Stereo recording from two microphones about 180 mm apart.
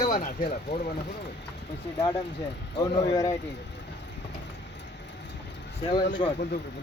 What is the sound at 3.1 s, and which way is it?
Speech, 20° left (ahead or behind).